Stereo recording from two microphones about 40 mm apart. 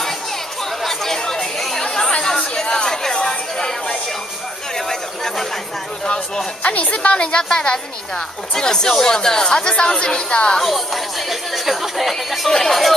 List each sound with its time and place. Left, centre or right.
0.8 s chatter: centre
4.7 s a sound: centre
6.0 s speech: left
6.6 s speech: left
10.6 s speech: centre
12.4 s speech: centre